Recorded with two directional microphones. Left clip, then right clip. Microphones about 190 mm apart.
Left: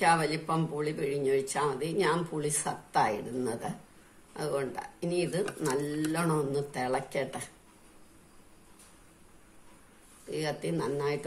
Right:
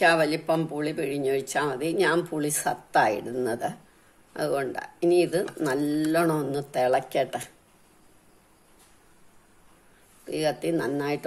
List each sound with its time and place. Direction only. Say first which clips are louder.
0.0 s speech: right 5 dB; 50° right (ahead or behind)
10.3 s speech: right 7 dB; 50° right (ahead or behind)